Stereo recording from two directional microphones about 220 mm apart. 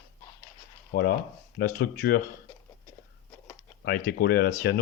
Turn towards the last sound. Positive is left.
turn(degrees=45)  # may be behind; listen again after turning